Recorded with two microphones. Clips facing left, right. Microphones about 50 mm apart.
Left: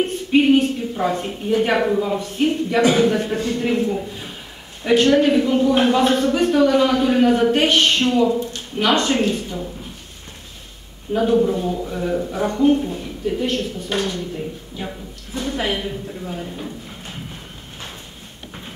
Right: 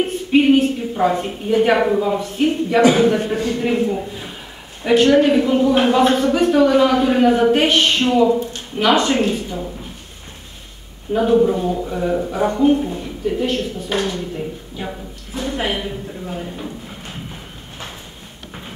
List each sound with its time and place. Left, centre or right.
0.0 s a sound: centre
1.5 s speech: centre
2.8 s a man's voice: right
3.5 s a woman's voice: centre
11.1 s speech: centre
15.3 s a sound: centre
15.6 s speech: centre